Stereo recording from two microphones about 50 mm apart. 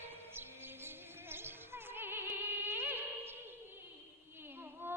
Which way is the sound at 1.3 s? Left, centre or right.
Right.